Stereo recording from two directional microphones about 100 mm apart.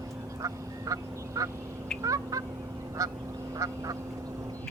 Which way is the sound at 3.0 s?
35° right (ahead or behind).